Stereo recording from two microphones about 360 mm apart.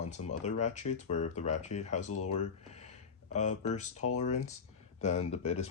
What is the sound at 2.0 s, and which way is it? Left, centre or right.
Speech, left.